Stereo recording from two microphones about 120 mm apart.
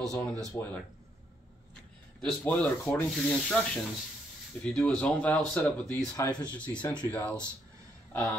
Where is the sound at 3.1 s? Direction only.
5° left (ahead or behind).